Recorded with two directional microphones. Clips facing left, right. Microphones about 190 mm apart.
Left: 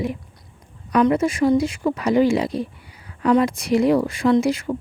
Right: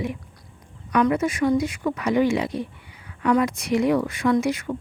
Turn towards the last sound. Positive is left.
turn(degrees=30)  # may be behind; listen again after turning